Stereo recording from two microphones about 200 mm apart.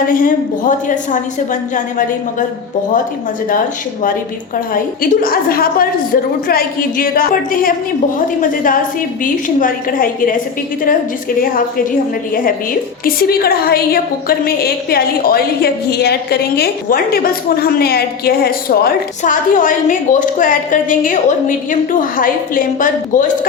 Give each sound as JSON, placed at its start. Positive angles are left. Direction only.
{"t": 0.1, "sound": "a woman's voice", "side_deg": 45}
{"t": 4.7, "sound": "a woman's voice", "side_deg": 45}
{"t": 13.1, "sound": "a woman's voice", "side_deg": 50}